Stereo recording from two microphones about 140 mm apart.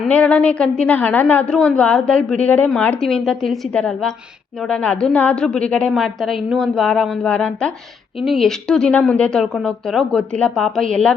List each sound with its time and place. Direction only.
0.1 s a woman's voice: 10° left (ahead or behind)